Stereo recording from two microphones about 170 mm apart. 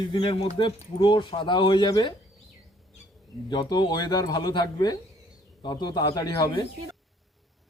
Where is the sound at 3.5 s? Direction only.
25° left (ahead or behind).